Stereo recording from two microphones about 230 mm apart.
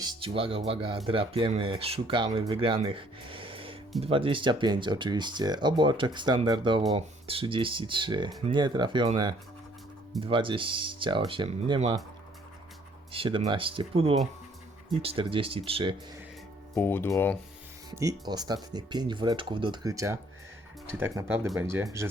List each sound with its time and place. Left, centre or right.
0.0 s speech: right
13.1 s speech: right
16.7 s speech: centre
17.9 s speech: centre